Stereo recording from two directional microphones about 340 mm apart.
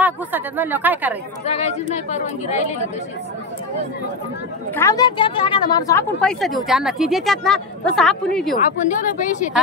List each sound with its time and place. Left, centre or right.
0.0 s a woman's voice: centre
1.4 s speech: centre
4.7 s a woman's voice: centre
8.5 s speech: left